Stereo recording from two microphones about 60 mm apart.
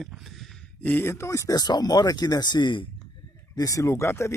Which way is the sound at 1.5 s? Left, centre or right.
Left.